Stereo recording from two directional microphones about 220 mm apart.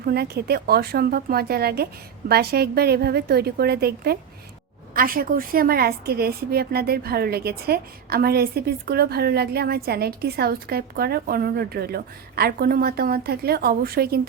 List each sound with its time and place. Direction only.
0.0 s a woman's voice: 45° right (ahead or behind)